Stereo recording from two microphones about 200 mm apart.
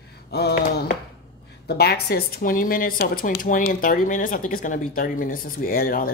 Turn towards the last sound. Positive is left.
turn(degrees=45)  # may be behind; listen again after turning